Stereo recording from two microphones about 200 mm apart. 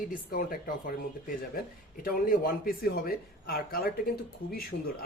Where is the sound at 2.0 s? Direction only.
45° left (ahead or behind).